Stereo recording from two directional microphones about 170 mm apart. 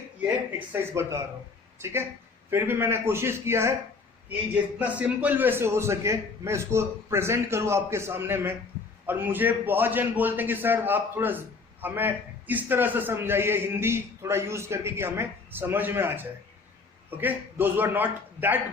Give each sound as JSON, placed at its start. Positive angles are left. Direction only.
{"t": 0.7, "sound": "a man's voice", "side_deg": -15}